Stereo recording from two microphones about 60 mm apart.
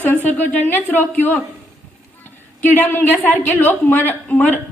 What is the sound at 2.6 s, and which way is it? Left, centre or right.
A woman's voice, left.